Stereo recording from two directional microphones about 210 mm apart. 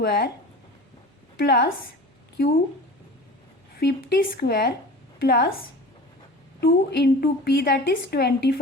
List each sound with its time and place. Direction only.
0.0 s a woman's voice: 50° left (ahead or behind)
1.4 s a woman's voice: 50° left (ahead or behind)
3.8 s a woman's voice: 50° left (ahead or behind)
6.6 s a woman's voice: 50° left (ahead or behind)